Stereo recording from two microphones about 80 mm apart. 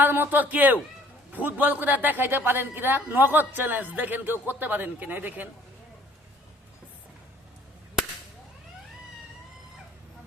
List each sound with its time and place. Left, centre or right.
0.0 s a man's voice: right